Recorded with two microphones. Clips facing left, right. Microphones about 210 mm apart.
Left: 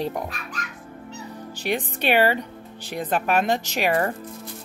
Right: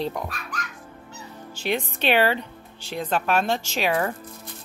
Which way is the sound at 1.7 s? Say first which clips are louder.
Even; 15° left (ahead or behind).